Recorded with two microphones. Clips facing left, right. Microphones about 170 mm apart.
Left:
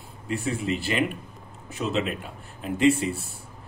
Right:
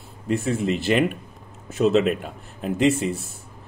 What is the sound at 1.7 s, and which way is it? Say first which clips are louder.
Speech: right 9 dB; 45° right (ahead or behind).